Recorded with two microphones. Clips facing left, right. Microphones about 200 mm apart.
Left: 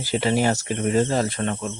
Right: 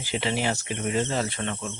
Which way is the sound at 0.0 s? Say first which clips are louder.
Left 6 dB; 40° left (ahead or behind).